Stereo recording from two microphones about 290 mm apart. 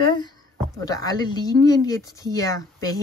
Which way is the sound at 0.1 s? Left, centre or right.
Centre.